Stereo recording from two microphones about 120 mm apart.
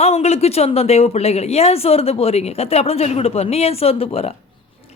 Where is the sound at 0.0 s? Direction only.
65° left (ahead or behind).